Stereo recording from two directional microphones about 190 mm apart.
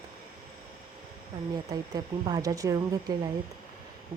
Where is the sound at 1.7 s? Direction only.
20° right (ahead or behind).